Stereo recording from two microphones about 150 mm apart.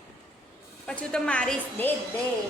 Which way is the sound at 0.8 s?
5° left (ahead or behind).